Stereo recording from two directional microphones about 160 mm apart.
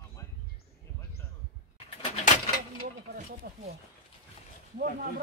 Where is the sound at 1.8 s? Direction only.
45° left (ahead or behind).